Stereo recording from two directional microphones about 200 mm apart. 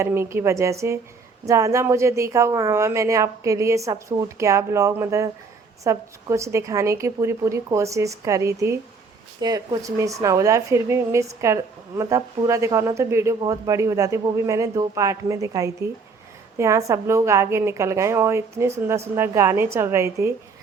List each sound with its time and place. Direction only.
0.0 s speech: 15° right (ahead or behind)